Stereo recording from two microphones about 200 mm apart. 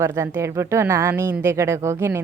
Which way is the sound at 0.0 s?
15° right (ahead or behind).